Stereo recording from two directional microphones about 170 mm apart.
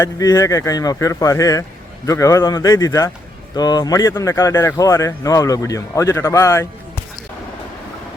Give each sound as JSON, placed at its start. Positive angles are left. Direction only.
{"t": 0.0, "sound": "speech", "side_deg": 20}